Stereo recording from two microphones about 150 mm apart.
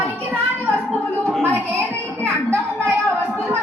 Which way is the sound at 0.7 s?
10° left (ahead or behind).